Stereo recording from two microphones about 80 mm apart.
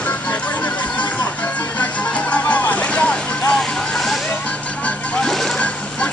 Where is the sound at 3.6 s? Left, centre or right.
Centre.